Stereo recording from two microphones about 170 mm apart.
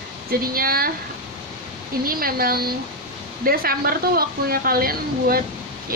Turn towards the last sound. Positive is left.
turn(degrees=-60)  # may be behind; listen again after turning